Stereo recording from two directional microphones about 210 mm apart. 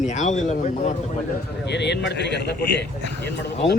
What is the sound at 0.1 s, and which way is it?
Speech, 35° left (ahead or behind).